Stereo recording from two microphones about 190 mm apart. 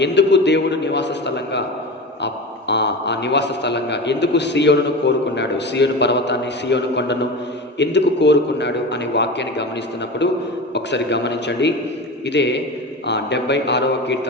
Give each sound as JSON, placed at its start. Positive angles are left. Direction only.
{"t": 0.0, "sound": "a man's voice", "side_deg": 65}
{"t": 2.2, "sound": "a man's voice", "side_deg": 65}